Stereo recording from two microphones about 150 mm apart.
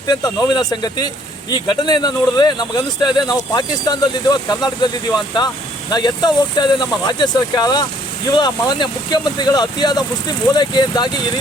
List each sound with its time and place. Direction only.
0.1 s speech: 25° left (ahead or behind)